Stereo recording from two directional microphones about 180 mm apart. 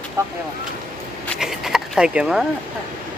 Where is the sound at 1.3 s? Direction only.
5° right (ahead or behind).